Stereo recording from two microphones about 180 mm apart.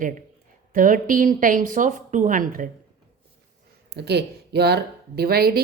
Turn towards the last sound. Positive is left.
turn(degrees=-60)  # may be behind; listen again after turning